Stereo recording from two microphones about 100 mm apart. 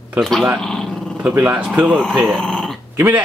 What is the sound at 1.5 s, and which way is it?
Speech, 15° right (ahead or behind).